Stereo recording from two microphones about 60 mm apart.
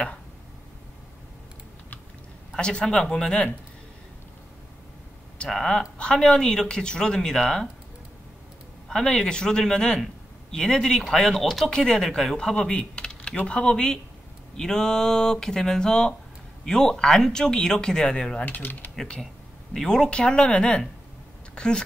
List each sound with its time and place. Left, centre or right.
2.5 s speech: centre
5.5 s speech: centre
8.8 s speech: centre
18.4 s speech: left
18.9 s speech: centre